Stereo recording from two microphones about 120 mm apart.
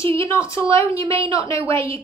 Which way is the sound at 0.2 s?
25° left (ahead or behind).